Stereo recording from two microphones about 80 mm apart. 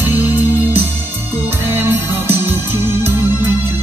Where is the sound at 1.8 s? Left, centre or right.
Right.